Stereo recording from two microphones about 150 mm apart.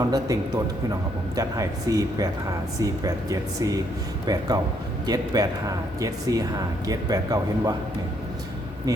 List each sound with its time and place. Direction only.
0.0 s speech: 25° right (ahead or behind)
8.9 s speech: 25° right (ahead or behind)